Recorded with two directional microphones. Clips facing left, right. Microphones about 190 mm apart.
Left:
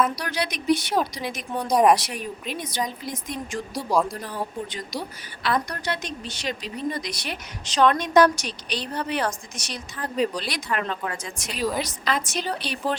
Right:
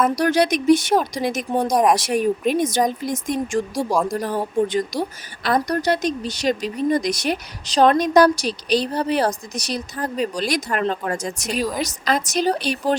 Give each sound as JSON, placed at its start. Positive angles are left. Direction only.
{"t": 0.0, "sound": "a woman's voice", "side_deg": -45}